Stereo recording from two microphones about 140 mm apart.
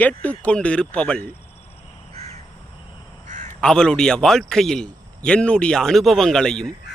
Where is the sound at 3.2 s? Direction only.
60° right (ahead or behind).